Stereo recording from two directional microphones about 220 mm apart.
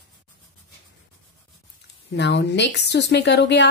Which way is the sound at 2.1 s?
50° left (ahead or behind).